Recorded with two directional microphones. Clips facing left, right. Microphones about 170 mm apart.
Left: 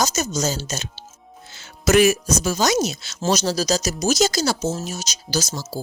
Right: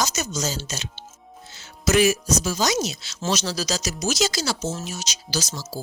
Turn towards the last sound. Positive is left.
turn(degrees=45)  # may be behind; listen again after turning